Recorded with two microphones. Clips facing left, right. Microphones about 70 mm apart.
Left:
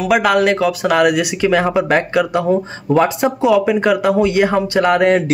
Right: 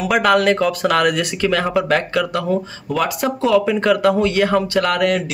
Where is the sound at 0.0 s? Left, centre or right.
Centre.